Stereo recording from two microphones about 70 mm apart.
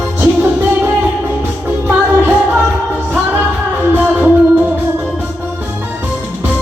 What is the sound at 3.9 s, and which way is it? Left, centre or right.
Music, right.